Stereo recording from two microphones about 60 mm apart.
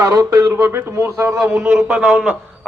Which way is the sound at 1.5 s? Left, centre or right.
Right.